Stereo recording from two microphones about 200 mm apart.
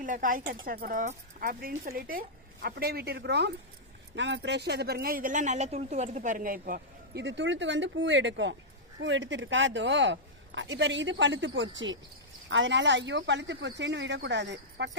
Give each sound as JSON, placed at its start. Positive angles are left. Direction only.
{"t": 0.0, "sound": "speech", "side_deg": -40}